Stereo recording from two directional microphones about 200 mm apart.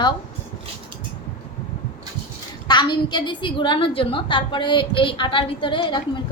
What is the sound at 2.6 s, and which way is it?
A woman's voice, 20° left (ahead or behind).